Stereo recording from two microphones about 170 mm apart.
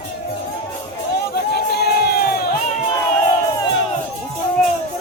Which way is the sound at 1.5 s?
70° left (ahead or behind).